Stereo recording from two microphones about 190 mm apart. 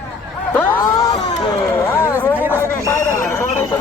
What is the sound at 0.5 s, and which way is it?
A man's voice, 20° left (ahead or behind).